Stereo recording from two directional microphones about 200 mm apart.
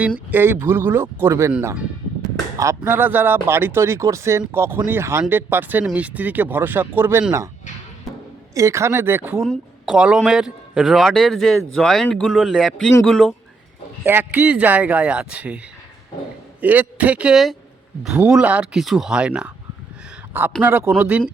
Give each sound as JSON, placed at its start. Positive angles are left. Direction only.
{"t": 0.3, "sound": "speech", "side_deg": -10}
{"t": 8.5, "sound": "speech", "side_deg": -15}
{"t": 9.4, "sound": "a man's voice", "side_deg": 0}
{"t": 14.0, "sound": "a man's voice", "side_deg": -10}
{"t": 20.6, "sound": "speech", "side_deg": -10}